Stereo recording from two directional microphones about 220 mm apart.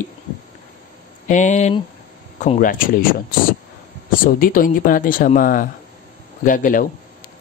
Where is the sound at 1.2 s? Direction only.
35° left (ahead or behind).